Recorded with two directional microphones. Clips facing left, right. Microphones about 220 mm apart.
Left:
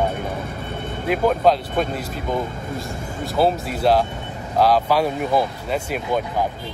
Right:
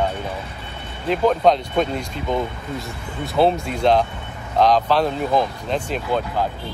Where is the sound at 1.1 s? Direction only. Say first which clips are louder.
Right 1 dB; 5° left (ahead or behind).